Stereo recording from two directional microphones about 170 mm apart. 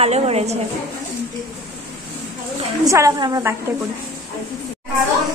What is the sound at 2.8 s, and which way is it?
Speech, 20° right (ahead or behind).